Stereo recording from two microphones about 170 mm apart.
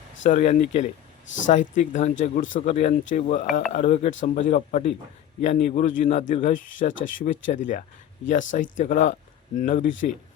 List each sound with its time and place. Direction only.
0.2 s a man's voice: 45° left (ahead or behind)